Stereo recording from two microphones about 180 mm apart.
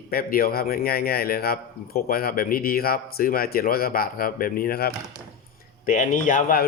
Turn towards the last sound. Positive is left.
turn(degrees=50)  # may be behind; listen again after turning